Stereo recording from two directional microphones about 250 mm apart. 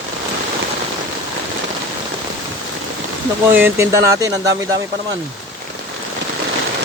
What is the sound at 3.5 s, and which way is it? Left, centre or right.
Speech, centre.